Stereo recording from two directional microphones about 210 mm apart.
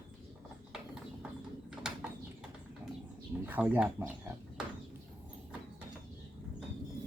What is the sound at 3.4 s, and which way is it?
Speech, 10° right (ahead or behind).